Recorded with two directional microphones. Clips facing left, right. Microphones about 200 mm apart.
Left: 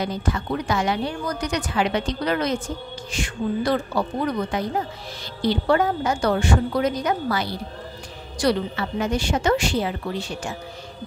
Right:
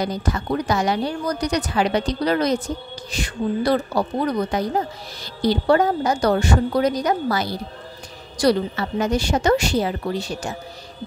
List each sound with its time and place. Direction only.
0.0 s a woman's voice: 40° right (ahead or behind)